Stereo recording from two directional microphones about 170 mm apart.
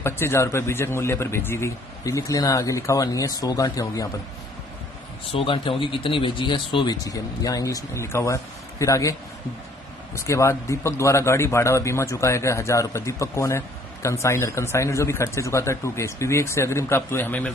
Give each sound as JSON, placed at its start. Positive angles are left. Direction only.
{"t": 0.0, "sound": "speech", "side_deg": 15}
{"t": 5.3, "sound": "speech", "side_deg": 30}
{"t": 10.1, "sound": "speech", "side_deg": 15}